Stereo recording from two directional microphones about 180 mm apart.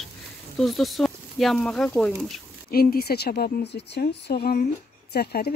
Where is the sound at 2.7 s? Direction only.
55° left (ahead or behind).